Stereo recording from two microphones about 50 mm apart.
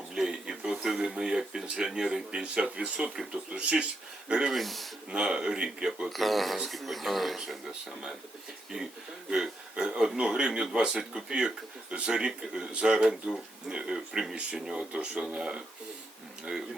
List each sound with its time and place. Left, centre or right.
0.1 s speech: centre
4.5 s speech: centre
5.1 s speech: centre
6.1 s speech: centre
9.3 s speech: centre